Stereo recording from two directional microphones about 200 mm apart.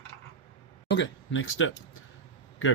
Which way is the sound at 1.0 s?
75° left (ahead or behind).